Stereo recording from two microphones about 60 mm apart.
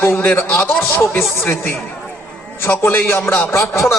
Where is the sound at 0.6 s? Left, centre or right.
Left.